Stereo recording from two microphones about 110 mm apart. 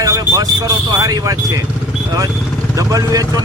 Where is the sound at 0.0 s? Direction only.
30° right (ahead or behind).